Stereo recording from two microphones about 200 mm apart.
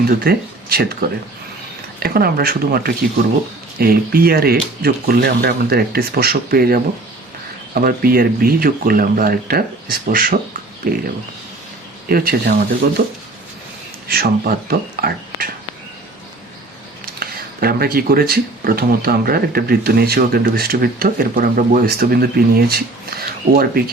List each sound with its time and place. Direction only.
0.1 s speech: 50° right (ahead or behind)
2.0 s speech: 50° right (ahead or behind)
12.0 s speech: 50° right (ahead or behind)
17.2 s speech: 50° right (ahead or behind)